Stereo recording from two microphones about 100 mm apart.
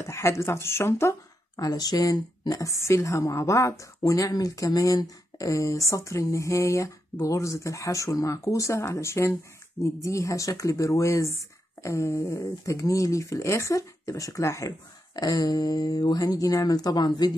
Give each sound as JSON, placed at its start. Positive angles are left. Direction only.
{"t": 0.0, "sound": "speech", "side_deg": 30}
{"t": 1.6, "sound": "speech", "side_deg": 40}